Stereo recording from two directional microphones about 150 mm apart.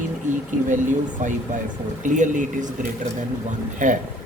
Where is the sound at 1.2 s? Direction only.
55° right (ahead or behind).